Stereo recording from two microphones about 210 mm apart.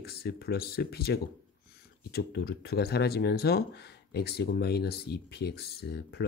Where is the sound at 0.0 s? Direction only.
50° left (ahead or behind).